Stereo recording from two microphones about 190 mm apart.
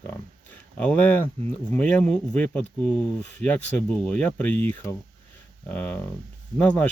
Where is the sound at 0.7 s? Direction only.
10° left (ahead or behind).